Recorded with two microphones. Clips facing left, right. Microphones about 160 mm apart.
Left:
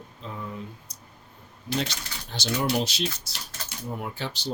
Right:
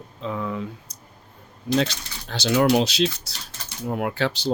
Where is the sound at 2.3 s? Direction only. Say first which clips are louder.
Right 9 dB; 80° right.